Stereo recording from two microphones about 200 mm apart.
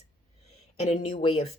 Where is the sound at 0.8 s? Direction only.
30° left (ahead or behind).